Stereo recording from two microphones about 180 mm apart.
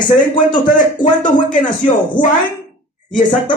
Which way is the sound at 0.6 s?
45° left (ahead or behind).